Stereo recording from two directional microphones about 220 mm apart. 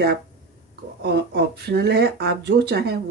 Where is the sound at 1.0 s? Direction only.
45° right (ahead or behind).